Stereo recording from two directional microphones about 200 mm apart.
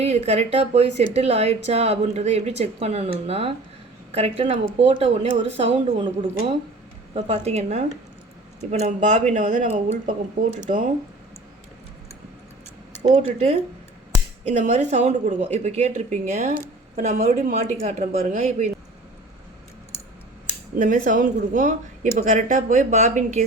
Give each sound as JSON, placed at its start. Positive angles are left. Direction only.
{"t": 0.0, "sound": "a woman's voice", "side_deg": -30}
{"t": 13.1, "sound": "a woman's voice", "side_deg": -30}
{"t": 20.7, "sound": "a woman's voice", "side_deg": -40}